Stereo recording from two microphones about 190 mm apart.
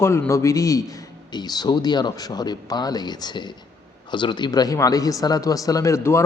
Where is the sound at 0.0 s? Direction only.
15° left (ahead or behind).